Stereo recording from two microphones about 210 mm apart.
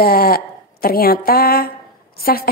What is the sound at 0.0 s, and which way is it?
A woman's voice, 45° left (ahead or behind).